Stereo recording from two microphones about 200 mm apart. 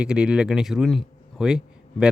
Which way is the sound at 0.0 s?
5° right (ahead or behind).